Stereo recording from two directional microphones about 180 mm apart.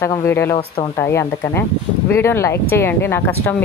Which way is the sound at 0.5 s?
25° left (ahead or behind).